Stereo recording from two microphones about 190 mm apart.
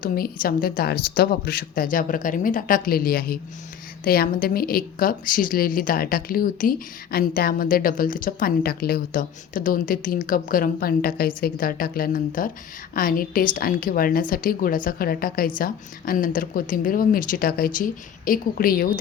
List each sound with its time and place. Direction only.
0.0 s a woman's voice: 50° left (ahead or behind)